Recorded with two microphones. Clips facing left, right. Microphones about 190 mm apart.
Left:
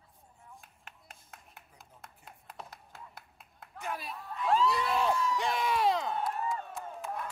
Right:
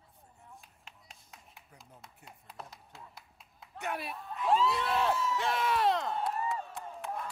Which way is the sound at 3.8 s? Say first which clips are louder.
Right 2 dB; 65° right (ahead or behind).